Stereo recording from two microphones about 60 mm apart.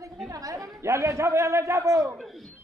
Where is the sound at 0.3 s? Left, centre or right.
Right.